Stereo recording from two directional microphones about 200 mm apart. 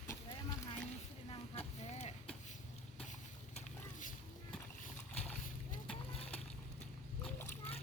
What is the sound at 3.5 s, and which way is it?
Boat, 40° left (ahead or behind).